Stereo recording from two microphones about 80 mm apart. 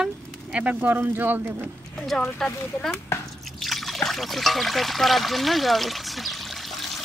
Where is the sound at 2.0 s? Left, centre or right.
Centre.